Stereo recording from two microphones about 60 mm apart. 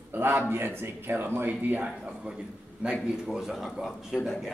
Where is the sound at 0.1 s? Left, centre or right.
Right.